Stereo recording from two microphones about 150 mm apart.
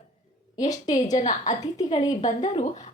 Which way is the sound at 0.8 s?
55° left (ahead or behind).